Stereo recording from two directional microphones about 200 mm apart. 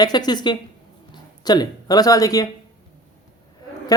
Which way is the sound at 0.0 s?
20° left (ahead or behind).